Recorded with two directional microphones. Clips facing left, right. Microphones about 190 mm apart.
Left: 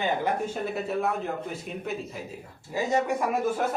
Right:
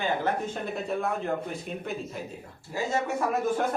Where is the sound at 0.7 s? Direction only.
5° left (ahead or behind).